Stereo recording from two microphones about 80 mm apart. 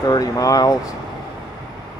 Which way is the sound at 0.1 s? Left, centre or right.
Left.